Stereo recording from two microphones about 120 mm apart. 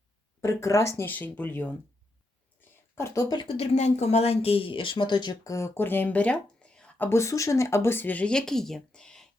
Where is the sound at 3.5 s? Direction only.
65° left (ahead or behind).